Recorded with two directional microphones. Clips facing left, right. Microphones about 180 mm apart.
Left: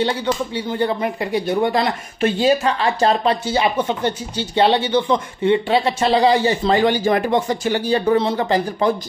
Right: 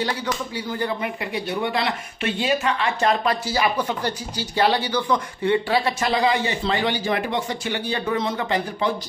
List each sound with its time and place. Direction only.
0.0 s speech: 25° left (ahead or behind)